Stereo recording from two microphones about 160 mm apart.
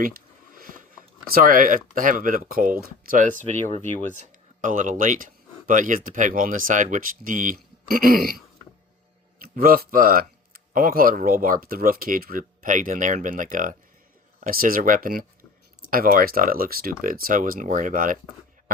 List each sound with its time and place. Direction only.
0.5 s a sound: 60° right (ahead or behind)
1.3 s speech: 60° right (ahead or behind)
9.4 s speech: 65° right (ahead or behind)